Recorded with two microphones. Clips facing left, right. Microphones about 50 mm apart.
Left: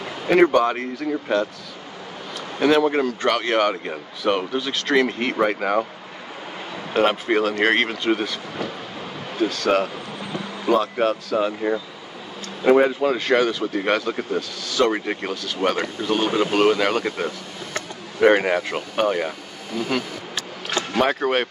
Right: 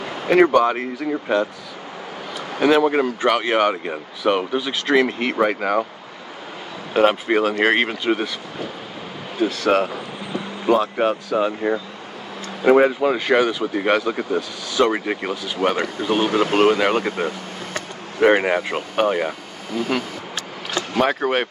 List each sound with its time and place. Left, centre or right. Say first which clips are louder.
0.3 s speech: right 1 dB; centre
6.9 s speech: right 2 dB; centre
9.4 s speech: right 2 dB; centre
21.0 s speech: right 1 dB; centre